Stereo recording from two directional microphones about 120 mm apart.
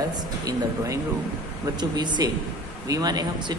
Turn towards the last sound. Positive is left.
turn(degrees=-35)  # may be behind; listen again after turning